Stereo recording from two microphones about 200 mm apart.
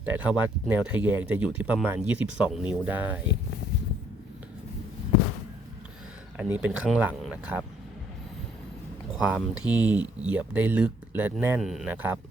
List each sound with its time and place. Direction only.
0.0 s speech: 5° right (ahead or behind)
6.3 s speech: 5° right (ahead or behind)
9.1 s speech: 5° right (ahead or behind)